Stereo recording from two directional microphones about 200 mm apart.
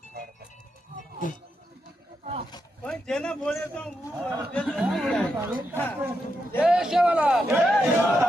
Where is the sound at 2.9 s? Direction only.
5° left (ahead or behind).